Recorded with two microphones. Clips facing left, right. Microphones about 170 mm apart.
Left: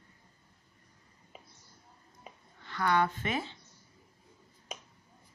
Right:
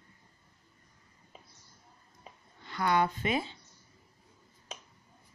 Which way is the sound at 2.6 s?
15° right (ahead or behind).